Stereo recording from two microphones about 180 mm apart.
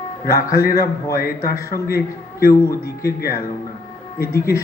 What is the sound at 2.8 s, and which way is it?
Speech, 60° left (ahead or behind).